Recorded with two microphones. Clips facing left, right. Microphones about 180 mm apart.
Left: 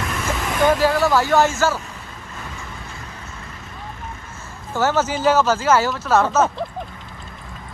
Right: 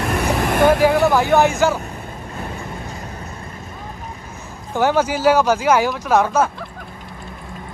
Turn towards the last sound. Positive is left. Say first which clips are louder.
# right 1 dB
turn(degrees=-10)  # may be behind; listen again after turning